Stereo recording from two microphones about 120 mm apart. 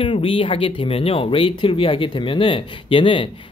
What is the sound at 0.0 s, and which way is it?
Speech, 45° left (ahead or behind).